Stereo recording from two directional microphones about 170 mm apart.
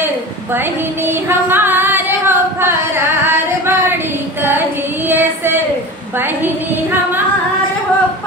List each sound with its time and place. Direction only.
1.0 s singing: 10° right (ahead or behind)
3.6 s female singing: 10° right (ahead or behind)